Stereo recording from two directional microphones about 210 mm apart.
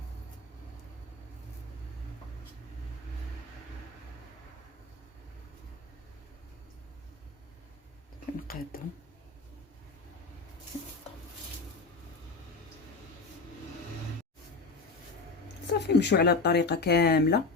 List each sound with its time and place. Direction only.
8.5 s speech: 45° left (ahead or behind)
15.9 s speech: 55° left (ahead or behind)